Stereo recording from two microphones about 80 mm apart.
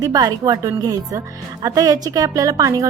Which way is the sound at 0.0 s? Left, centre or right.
Right.